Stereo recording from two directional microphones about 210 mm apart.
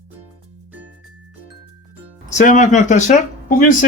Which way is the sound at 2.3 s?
35° left (ahead or behind).